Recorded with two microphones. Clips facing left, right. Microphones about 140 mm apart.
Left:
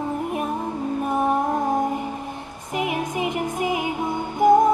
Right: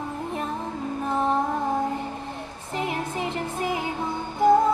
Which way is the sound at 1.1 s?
15° left (ahead or behind).